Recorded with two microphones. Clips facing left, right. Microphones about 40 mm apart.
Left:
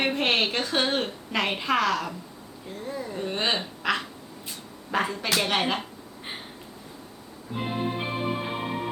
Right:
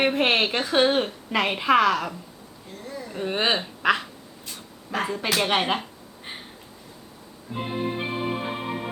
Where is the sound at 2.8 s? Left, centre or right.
Centre.